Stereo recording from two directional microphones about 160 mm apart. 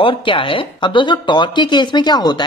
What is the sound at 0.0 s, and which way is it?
Speech, 35° left (ahead or behind).